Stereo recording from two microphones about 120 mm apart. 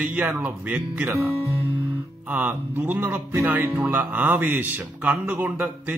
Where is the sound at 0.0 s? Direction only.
15° right (ahead or behind).